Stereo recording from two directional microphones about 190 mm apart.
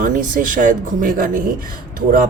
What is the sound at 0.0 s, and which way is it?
Speech, 45° right (ahead or behind).